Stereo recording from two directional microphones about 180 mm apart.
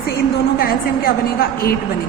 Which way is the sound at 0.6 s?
55° left (ahead or behind).